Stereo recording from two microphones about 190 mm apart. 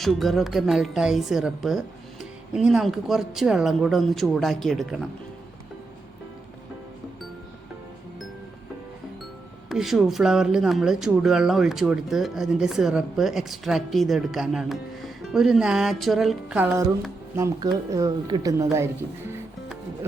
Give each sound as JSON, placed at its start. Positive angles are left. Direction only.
{"t": 0.0, "sound": "speech", "side_deg": 0}
{"t": 9.6, "sound": "speech", "side_deg": 0}
{"t": 17.3, "sound": "speech", "side_deg": -15}